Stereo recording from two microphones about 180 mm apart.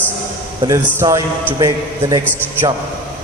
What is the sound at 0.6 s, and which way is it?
A man's voice, 20° right (ahead or behind).